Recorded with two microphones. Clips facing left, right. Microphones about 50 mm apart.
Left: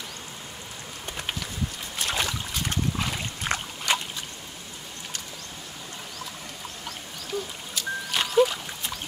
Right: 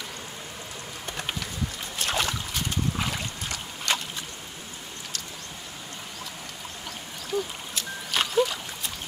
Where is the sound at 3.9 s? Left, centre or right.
Centre.